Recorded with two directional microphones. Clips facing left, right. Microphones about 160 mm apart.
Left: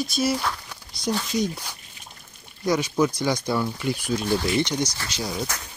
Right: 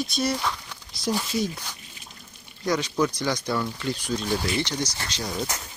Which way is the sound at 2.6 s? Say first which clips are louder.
Left 2 dB; 10° left (ahead or behind).